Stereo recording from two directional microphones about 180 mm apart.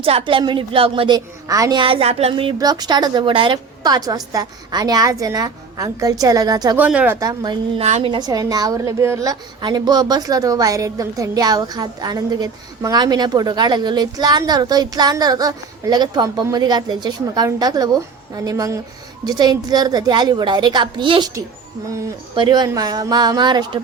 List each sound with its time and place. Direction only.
0.0 s a woman's voice: 30° right (ahead or behind)
6.7 s speech: 5° right (ahead or behind)
7.2 s a woman's voice: 20° right (ahead or behind)
7.8 s a woman's voice: 40° right (ahead or behind)
8.1 s a woman's voice: 20° right (ahead or behind)